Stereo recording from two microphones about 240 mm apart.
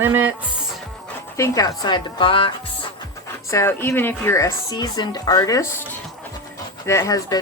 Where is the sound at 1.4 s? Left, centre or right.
Centre.